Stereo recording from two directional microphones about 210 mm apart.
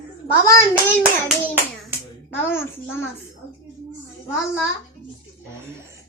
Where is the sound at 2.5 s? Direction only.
10° left (ahead or behind).